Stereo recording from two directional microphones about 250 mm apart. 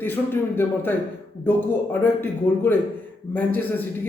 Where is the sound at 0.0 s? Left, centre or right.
Centre.